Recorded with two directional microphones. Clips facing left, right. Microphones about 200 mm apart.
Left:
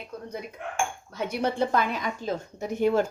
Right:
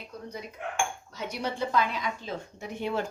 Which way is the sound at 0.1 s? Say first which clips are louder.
Left 3 dB; 55° left (ahead or behind).